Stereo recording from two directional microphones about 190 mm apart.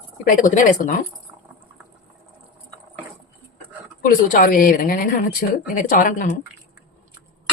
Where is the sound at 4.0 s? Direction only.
45° left (ahead or behind).